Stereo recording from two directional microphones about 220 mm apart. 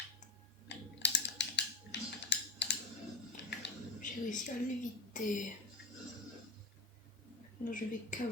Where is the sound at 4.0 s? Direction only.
35° left (ahead or behind).